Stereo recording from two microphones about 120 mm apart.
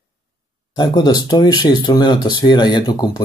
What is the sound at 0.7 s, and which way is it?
Speech, 35° left (ahead or behind).